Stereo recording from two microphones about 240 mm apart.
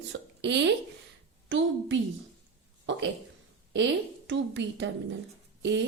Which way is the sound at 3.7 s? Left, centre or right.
Right.